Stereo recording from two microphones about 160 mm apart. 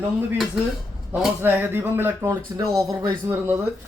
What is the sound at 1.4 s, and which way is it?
A man's voice, 15° right (ahead or behind).